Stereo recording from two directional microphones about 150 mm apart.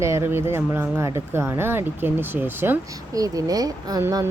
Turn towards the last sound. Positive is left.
turn(degrees=-20)  # may be behind; listen again after turning